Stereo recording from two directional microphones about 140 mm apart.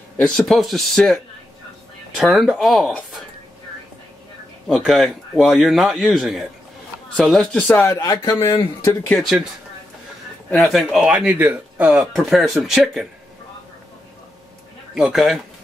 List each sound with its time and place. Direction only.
0.2 s speech: centre (ahead or behind)
4.6 s speech: centre (ahead or behind)
7.9 s speech: 25° left (ahead or behind)
9.1 s speech: centre (ahead or behind)
10.5 s speech: 5° left (ahead or behind)
15.0 s speech: 5° right (ahead or behind)